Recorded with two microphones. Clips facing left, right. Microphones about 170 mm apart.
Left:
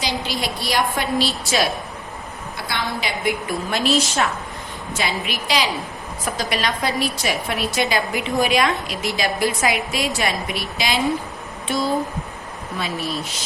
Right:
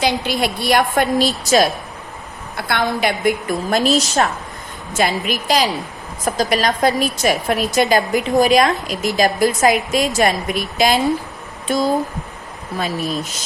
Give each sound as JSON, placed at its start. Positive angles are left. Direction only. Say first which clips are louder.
{"t": 0.0, "sound": "a woman's voice", "louder": "right 6 dB", "side_deg": -55}
{"t": 2.6, "sound": "a woman's voice", "louder": "right 8 dB", "side_deg": -55}